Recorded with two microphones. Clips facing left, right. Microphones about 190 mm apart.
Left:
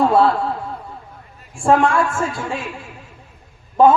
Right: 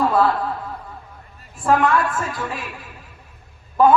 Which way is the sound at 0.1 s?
25° left (ahead or behind).